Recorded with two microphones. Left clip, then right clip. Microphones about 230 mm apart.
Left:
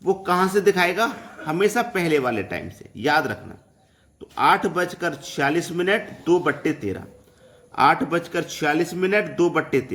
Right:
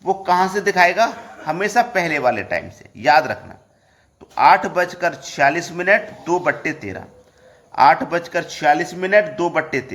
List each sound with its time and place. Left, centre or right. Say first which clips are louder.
0.2 s a man's voice: right 3 dB; centre
4.4 s a man's voice: right 5 dB; centre